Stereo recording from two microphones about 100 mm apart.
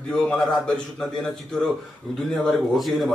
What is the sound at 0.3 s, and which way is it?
Speech, 5° left (ahead or behind).